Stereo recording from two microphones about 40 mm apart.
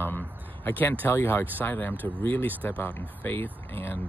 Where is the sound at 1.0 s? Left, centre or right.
Left.